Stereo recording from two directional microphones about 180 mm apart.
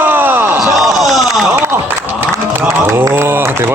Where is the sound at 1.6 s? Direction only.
10° right (ahead or behind).